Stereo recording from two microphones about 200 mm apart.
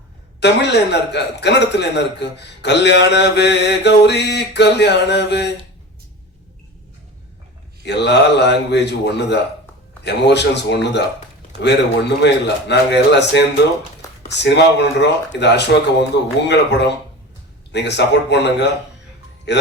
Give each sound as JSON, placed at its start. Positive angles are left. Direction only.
{"t": 0.3, "sound": "a man's voice", "side_deg": 60}
{"t": 7.9, "sound": "a man's voice", "side_deg": 60}